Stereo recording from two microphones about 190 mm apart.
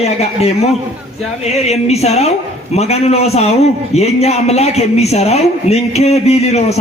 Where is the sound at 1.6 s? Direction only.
35° left (ahead or behind).